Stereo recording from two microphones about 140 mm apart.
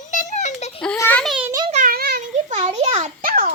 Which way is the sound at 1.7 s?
75° right (ahead or behind).